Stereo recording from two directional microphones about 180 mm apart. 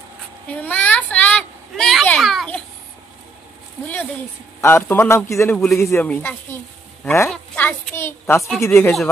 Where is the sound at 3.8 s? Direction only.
10° left (ahead or behind).